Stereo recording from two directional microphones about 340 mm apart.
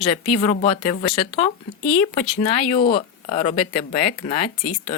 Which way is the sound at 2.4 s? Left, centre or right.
Centre.